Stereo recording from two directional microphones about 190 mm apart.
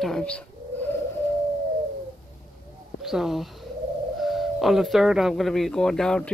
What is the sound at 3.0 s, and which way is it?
Speech, centre (ahead or behind).